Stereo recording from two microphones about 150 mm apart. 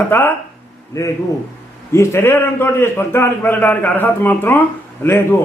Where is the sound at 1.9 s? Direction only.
20° left (ahead or behind).